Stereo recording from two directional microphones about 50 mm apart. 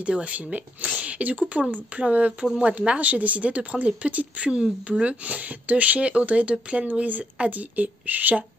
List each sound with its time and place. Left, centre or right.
0.0 s speech: right
6.9 s a woman's voice: right